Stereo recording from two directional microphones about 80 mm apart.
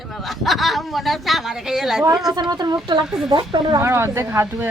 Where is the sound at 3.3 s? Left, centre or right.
Right.